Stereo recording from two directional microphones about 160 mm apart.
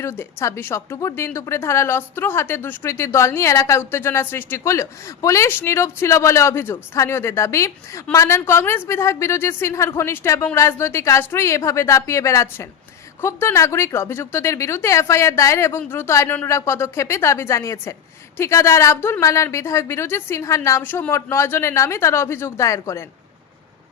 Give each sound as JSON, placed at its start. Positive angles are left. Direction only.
{"t": 0.0, "sound": "a woman's voice", "side_deg": 15}